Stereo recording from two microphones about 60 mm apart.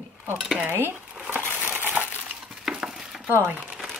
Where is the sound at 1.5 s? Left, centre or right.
Right.